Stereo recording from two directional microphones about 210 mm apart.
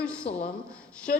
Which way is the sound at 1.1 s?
45° left (ahead or behind).